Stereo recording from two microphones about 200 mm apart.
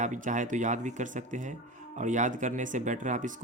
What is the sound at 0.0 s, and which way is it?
Speech, 40° right (ahead or behind).